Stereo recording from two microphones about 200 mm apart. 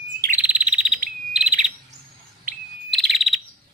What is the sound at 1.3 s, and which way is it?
Bird, 5° right (ahead or behind).